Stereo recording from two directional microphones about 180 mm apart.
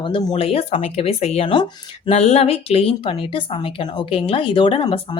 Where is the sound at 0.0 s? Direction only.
25° left (ahead or behind).